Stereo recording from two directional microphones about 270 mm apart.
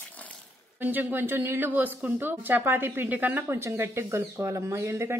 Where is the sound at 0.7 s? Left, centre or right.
Centre.